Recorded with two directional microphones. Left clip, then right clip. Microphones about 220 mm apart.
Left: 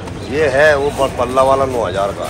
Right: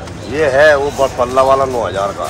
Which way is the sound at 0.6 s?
40° right (ahead or behind).